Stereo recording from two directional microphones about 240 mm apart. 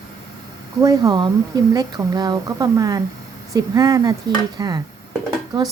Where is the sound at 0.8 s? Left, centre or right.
Centre.